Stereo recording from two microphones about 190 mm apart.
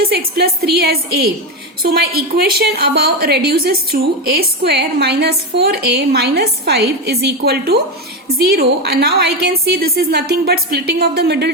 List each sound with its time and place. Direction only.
0.0 s a woman's voice: 55° right (ahead or behind)